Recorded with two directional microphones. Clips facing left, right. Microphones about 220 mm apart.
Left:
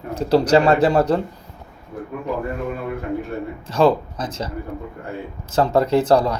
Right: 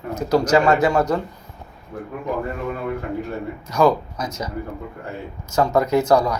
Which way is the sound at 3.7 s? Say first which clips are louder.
Left 1 dB; 30° left (ahead or behind).